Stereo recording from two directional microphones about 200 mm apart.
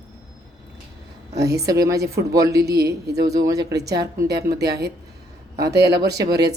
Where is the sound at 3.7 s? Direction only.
55° right (ahead or behind).